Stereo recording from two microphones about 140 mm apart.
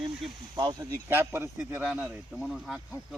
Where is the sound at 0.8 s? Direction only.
15° right (ahead or behind).